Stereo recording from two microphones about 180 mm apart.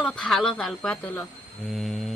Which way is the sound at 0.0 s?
5° left (ahead or behind).